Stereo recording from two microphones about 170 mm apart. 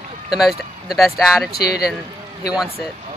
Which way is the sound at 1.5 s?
65° left (ahead or behind).